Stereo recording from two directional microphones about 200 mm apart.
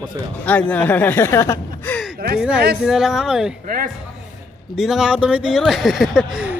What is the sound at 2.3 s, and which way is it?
Speech, 5° right (ahead or behind).